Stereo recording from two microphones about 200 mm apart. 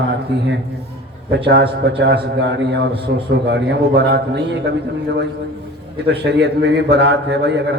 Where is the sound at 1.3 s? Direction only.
55° right (ahead or behind).